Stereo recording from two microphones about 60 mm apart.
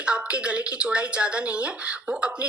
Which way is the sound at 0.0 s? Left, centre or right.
Centre.